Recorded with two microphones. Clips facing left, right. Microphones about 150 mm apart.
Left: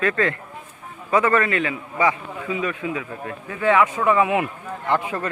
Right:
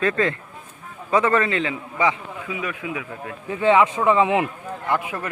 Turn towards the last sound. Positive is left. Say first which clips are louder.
# left 2 dB
turn(degrees=-10)  # may be behind; listen again after turning